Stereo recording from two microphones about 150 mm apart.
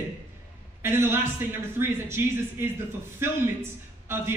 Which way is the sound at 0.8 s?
15° right (ahead or behind).